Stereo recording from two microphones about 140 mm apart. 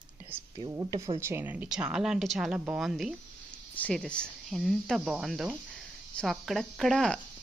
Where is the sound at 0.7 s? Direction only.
20° right (ahead or behind).